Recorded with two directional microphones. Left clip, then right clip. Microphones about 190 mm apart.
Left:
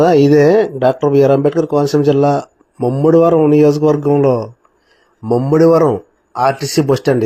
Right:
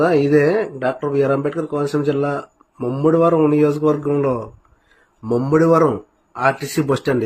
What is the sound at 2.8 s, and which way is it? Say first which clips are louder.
A man's voice: left 5 dB; 20° left (ahead or behind).